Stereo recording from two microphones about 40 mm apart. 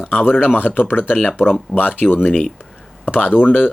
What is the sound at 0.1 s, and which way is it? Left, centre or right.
Speech, left.